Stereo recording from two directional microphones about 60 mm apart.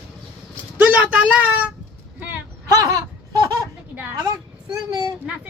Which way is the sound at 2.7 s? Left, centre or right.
Right.